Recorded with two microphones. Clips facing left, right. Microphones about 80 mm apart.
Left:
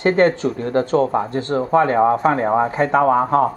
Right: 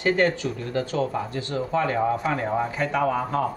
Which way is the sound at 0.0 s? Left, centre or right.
Left.